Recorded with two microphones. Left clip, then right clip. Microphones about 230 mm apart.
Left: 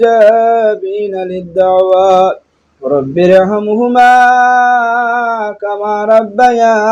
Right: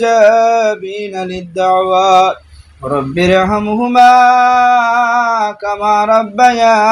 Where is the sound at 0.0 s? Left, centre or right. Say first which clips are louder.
Left 2 dB; right.